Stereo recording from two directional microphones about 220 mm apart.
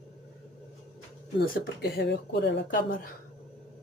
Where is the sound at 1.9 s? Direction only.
50° left (ahead or behind).